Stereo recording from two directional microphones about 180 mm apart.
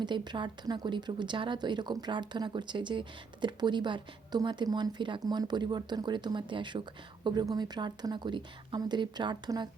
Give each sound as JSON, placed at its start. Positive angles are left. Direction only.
{"t": 0.0, "sound": "speech", "side_deg": -25}